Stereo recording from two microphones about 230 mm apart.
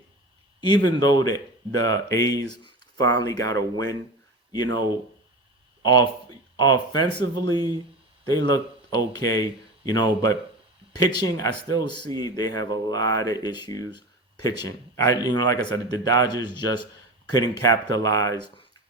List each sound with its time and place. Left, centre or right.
0.9 s speech: centre